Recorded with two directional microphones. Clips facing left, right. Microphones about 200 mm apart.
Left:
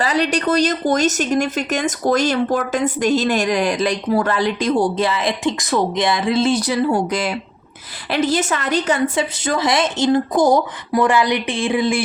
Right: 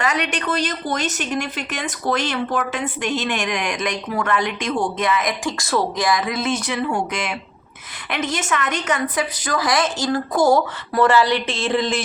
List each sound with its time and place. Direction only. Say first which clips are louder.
0.0 s speech: left 5 dB; 35° left (ahead or behind); by 12.0 s 10° left (ahead or behind)